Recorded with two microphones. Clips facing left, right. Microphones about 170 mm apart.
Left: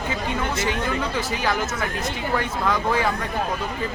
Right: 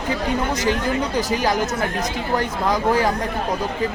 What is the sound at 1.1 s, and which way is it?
Speech, 40° right (ahead or behind).